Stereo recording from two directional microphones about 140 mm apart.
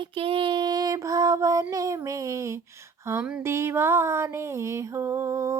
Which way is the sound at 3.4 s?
20° right (ahead or behind).